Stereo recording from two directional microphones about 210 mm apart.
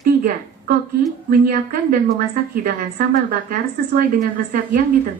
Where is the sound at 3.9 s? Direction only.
40° right (ahead or behind).